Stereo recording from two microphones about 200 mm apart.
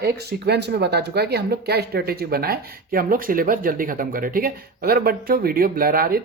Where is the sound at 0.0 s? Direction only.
55° right (ahead or behind).